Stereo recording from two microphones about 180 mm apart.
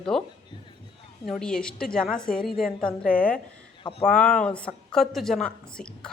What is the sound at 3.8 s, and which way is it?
Speech, 30° left (ahead or behind).